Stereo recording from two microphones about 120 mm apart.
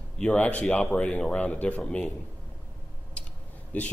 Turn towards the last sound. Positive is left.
turn(degrees=10)  # may be behind; listen again after turning